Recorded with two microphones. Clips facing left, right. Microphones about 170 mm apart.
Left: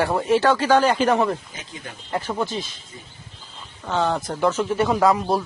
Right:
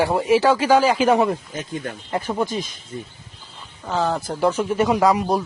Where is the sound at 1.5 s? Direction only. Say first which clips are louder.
Right 9 dB; 50° right (ahead or behind).